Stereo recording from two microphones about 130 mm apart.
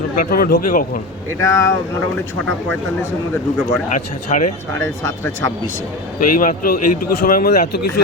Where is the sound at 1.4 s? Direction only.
25° left (ahead or behind).